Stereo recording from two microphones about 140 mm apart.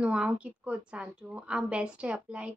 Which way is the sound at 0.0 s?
10° right (ahead or behind).